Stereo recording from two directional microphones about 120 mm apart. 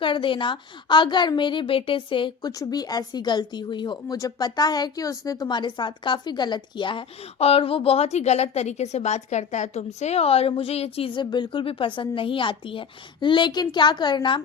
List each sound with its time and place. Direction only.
0.0 s a woman's voice: 45° left (ahead or behind)
2.5 s speech: 30° left (ahead or behind)
7.3 s a woman's voice: 55° left (ahead or behind); by 14.4 s 40° left (ahead or behind)